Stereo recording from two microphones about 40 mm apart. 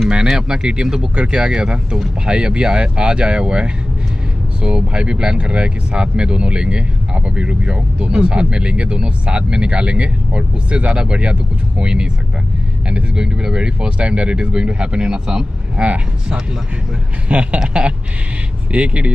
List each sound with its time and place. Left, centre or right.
0.1 s speech: centre
15.8 s speech: right
18.7 s speech: right